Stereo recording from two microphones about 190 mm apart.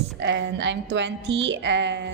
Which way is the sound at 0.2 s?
70° right (ahead or behind).